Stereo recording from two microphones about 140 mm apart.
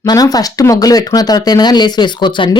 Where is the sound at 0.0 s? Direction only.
25° left (ahead or behind).